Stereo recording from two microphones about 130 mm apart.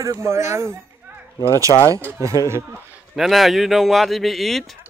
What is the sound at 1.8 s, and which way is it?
Speech, 25° right (ahead or behind).